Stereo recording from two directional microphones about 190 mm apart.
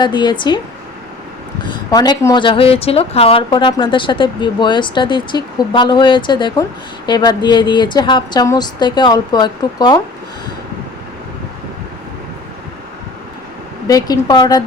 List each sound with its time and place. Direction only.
0.0 s a woman's voice: 25° left (ahead or behind)
1.7 s a woman's voice: 20° left (ahead or behind)
13.8 s a woman's voice: 20° left (ahead or behind)